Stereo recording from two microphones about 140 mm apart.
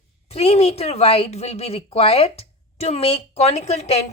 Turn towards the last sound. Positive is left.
turn(degrees=50)  # may be behind; listen again after turning